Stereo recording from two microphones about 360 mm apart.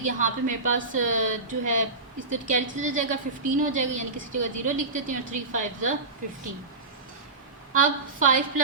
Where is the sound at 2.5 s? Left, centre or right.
Right.